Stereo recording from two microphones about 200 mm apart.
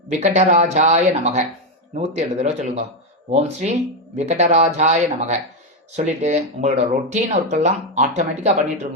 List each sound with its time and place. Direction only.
0.1 s speech: 35° right (ahead or behind)